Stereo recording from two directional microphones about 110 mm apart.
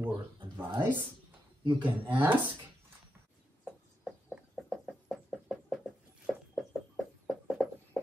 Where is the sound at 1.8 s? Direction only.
15° right (ahead or behind).